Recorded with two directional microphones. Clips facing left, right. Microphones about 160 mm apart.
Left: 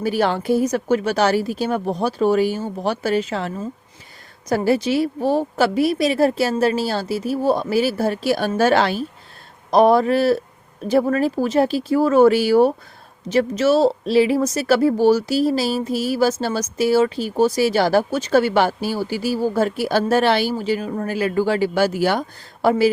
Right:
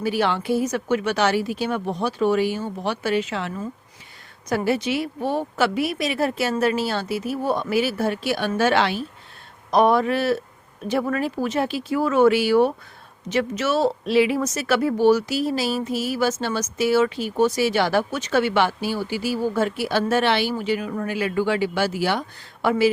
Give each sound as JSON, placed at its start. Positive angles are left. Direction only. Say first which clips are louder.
{"t": 0.0, "sound": "a woman's voice", "louder": "left 3 dB", "side_deg": 45}